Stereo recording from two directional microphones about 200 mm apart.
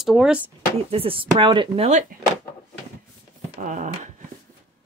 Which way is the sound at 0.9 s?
25° right (ahead or behind).